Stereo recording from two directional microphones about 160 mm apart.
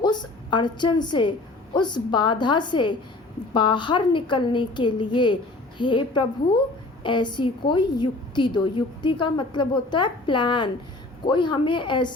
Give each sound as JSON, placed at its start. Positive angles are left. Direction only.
{"t": 0.0, "sound": "a woman's voice", "side_deg": 25}